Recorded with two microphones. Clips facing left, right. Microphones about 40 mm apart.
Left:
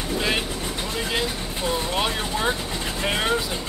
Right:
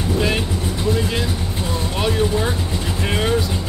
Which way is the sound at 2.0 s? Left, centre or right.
Centre.